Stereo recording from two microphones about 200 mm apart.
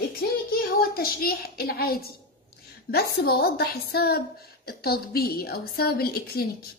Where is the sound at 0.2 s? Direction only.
50° left (ahead or behind).